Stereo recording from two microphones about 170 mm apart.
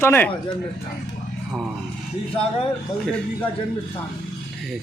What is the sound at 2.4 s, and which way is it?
Speech, 35° left (ahead or behind).